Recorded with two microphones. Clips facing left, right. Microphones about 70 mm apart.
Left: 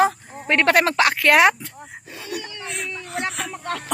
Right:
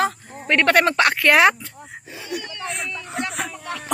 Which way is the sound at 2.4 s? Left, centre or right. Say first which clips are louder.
Right 3 dB; centre.